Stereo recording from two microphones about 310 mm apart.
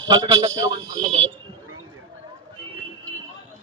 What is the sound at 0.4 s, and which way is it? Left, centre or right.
Speech, centre.